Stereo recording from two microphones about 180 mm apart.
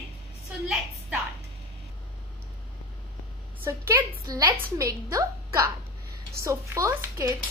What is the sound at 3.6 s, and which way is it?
A woman's voice, 10° right (ahead or behind).